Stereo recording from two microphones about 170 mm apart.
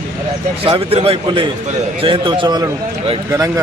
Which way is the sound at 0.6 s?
35° right (ahead or behind).